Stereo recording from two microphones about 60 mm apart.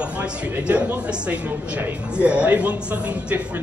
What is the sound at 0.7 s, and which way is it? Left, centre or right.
Speech, right.